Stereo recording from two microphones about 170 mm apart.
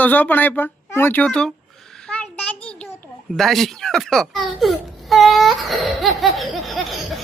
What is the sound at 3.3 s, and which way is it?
Speech, centre (ahead or behind).